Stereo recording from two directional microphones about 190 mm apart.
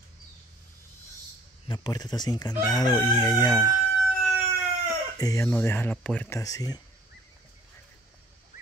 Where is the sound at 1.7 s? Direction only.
20° left (ahead or behind).